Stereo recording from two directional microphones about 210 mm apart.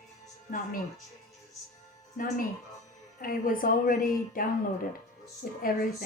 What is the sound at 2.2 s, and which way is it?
A woman's voice, 40° left (ahead or behind).